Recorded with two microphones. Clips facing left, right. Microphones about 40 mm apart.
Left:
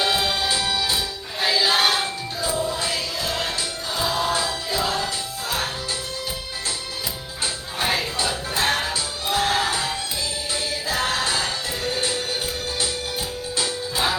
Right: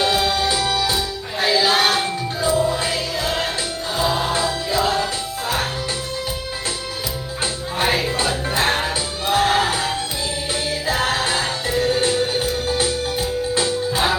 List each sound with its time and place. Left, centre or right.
0.0 s music: centre
2.6 s music: right
7.8 s music: right
9.7 s music: centre